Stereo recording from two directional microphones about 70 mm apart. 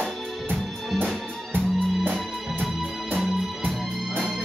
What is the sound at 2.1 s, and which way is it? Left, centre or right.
Music, centre.